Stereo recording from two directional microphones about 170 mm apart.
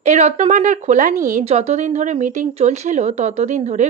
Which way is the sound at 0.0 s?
40° right (ahead or behind).